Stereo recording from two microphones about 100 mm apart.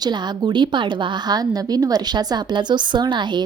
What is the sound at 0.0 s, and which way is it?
A woman's voice, 45° right (ahead or behind).